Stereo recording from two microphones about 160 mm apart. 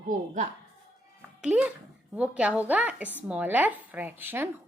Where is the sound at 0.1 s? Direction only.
55° right (ahead or behind).